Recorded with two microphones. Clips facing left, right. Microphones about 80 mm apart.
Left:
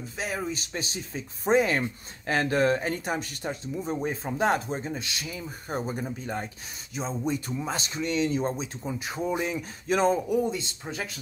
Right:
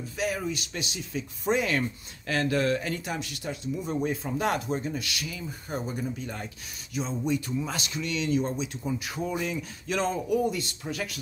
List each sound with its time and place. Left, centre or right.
0.2 s speech: left